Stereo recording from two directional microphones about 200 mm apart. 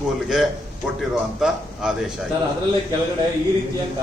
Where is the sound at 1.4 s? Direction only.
5° right (ahead or behind).